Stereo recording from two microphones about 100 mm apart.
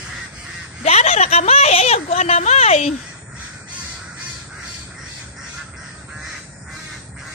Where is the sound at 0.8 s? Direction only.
90° left.